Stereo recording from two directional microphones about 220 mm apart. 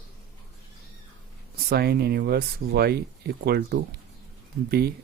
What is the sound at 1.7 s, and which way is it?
Speech, 45° right (ahead or behind).